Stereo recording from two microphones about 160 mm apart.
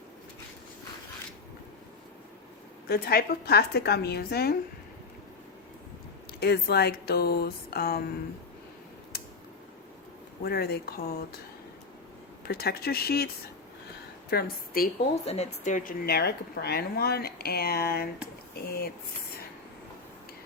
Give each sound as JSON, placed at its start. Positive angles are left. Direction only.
{"t": 2.9, "sound": "speech", "side_deg": 70}
{"t": 6.4, "sound": "speech", "side_deg": 85}
{"t": 10.4, "sound": "speech", "side_deg": 80}
{"t": 12.5, "sound": "a woman's voice", "side_deg": 80}
{"t": 15.2, "sound": "speech", "side_deg": 40}